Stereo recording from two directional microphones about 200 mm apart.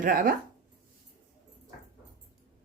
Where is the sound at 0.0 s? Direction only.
45° right (ahead or behind).